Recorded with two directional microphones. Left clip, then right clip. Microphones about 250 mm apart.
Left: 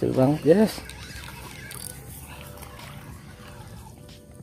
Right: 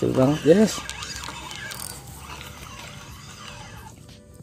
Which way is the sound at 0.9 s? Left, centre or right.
Right.